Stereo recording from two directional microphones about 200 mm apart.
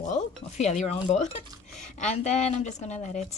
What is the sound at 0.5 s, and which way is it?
A woman's voice, 35° left (ahead or behind).